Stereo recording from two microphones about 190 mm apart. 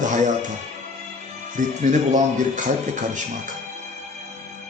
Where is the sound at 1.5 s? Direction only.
40° right (ahead or behind).